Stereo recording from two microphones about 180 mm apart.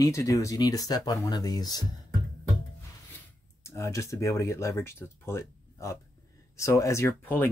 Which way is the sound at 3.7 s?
15° left (ahead or behind).